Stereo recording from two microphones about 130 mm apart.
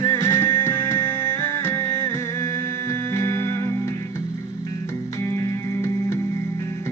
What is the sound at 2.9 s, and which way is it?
Music, 20° left (ahead or behind).